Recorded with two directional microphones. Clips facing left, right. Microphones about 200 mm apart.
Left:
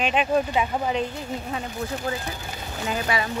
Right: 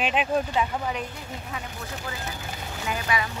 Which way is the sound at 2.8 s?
30° left (ahead or behind).